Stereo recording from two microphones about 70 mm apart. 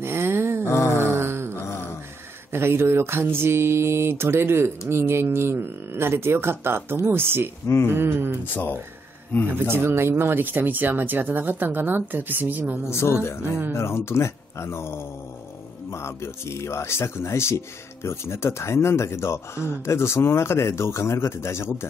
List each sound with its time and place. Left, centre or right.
0.0 s a sound: right
0.7 s a sound: left
1.0 s a sound: right
2.5 s mantra: right
7.6 s speech: left
7.9 s mantra: right
8.5 s speech: left
9.5 s speech: right
12.9 s speech: left
13.4 s speech: right
13.7 s speech: left